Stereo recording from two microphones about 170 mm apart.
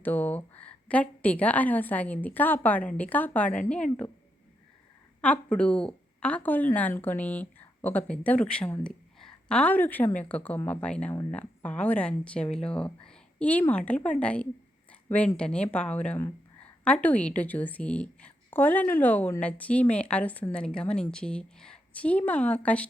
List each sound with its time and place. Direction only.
0.0 s a woman's voice: 10° left (ahead or behind)
5.2 s a woman's voice: 10° left (ahead or behind)